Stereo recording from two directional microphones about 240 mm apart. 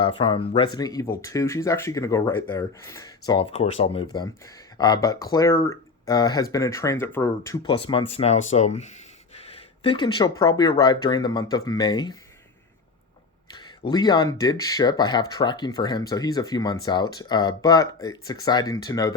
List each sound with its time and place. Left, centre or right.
0.0 s speech: left
13.5 s a sound: centre
13.9 s speech: centre